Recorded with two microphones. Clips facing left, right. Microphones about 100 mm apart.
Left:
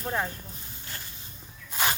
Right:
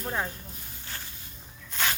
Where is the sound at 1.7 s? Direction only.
15° left (ahead or behind).